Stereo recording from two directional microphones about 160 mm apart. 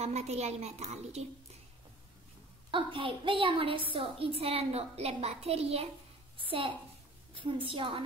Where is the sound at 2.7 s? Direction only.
30° right (ahead or behind).